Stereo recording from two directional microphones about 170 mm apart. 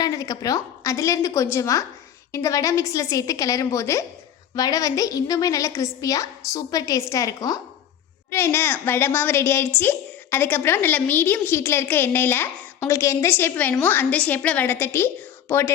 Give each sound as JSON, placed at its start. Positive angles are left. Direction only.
{"t": 0.0, "sound": "a woman's voice", "side_deg": 20}